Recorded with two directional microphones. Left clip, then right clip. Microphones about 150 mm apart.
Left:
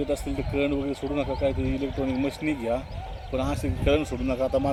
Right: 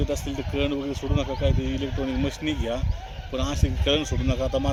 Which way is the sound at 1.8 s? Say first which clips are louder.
Left 1 dB; 5° left (ahead or behind).